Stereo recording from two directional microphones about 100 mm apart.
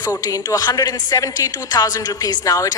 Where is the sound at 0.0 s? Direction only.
40° left (ahead or behind).